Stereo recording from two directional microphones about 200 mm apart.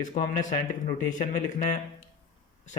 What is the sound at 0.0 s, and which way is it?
Speech, 40° left (ahead or behind).